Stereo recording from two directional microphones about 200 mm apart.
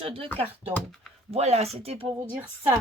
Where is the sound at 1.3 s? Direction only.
30° right (ahead or behind).